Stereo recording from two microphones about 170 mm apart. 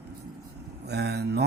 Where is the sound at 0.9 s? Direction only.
75° right (ahead or behind).